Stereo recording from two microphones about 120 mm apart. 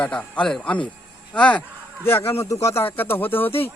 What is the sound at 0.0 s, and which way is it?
Speech, 10° left (ahead or behind).